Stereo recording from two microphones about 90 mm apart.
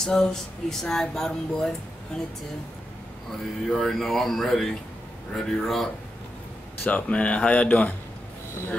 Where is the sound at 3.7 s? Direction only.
5° left (ahead or behind).